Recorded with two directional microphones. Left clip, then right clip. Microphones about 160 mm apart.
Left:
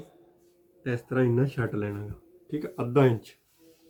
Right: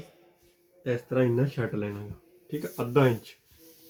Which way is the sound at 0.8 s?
15° left (ahead or behind).